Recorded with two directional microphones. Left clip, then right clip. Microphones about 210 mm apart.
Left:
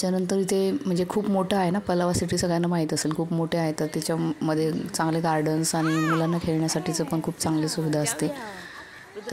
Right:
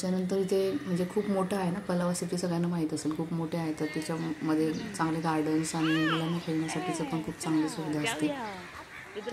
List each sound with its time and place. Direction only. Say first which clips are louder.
0.0 s speech: left 5 dB; 40° left (ahead or behind)
5.9 s speech: left 3 dB; 15° left (ahead or behind)
6.6 s speech: left 5 dB; 40° left (ahead or behind)